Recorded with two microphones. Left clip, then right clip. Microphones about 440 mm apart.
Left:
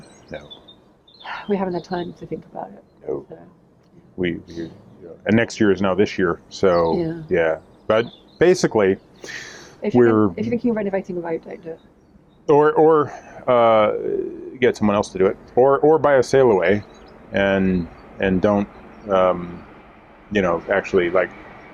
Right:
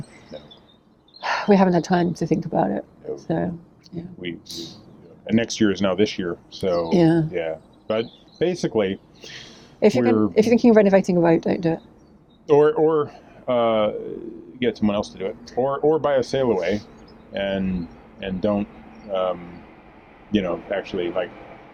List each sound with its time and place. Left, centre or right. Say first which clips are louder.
1.2 s speech: right 6 dB; right
3.9 s speech: right 18 dB; right
5.2 s speech: left 3 dB; centre
6.9 s speech: right 6 dB; right
7.3 s speech: left 8 dB; centre
9.8 s speech: left 2 dB; right
12.5 s speech: left 3 dB; centre